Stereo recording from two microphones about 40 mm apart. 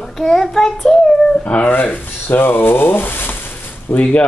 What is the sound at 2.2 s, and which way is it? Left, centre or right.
Speech, left.